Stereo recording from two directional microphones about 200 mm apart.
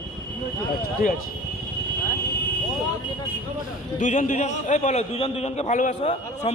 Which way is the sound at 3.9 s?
40° left (ahead or behind).